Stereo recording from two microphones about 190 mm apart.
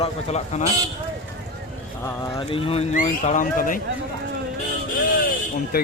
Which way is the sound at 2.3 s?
30° left (ahead or behind).